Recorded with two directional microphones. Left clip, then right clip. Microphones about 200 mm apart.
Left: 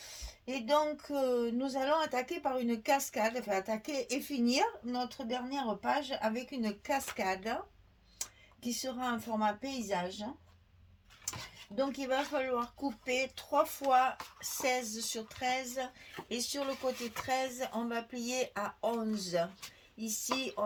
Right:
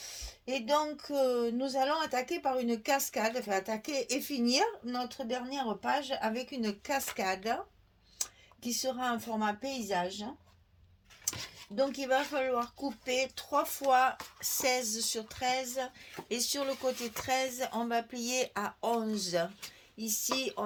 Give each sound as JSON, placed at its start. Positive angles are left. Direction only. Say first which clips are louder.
{"t": 0.1, "sound": "speech", "louder": "right 4 dB", "side_deg": -40}
{"t": 11.3, "sound": "speech", "louder": "right 4 dB", "side_deg": -40}